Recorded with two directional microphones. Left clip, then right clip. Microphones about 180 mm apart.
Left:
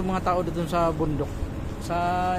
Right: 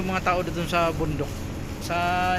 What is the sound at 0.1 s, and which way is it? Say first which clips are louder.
Speech: right 1 dB; 15° left (ahead or behind).